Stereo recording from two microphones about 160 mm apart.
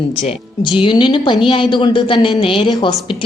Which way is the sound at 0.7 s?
30° left (ahead or behind).